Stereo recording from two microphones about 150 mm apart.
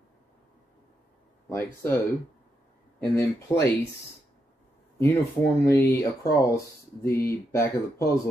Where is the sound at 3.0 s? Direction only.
15° left (ahead or behind).